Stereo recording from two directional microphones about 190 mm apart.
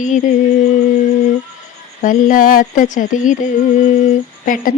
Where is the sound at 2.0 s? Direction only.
45° left (ahead or behind).